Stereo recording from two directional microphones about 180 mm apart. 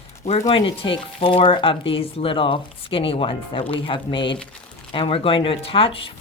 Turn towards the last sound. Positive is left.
turn(degrees=30)  # may be behind; listen again after turning